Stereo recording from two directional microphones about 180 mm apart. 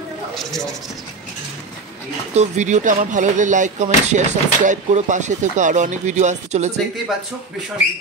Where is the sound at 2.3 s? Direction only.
40° right (ahead or behind).